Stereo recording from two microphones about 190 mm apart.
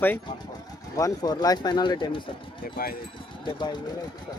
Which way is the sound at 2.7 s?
50° left (ahead or behind).